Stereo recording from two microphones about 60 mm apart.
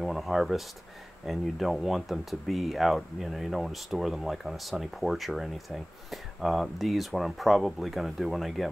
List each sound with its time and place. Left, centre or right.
0.0 s speech: centre